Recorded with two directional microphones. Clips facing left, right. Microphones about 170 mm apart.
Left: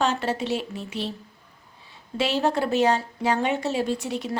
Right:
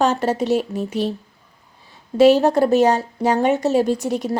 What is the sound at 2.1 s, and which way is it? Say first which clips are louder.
Speech: right 11 dB; 40° right (ahead or behind).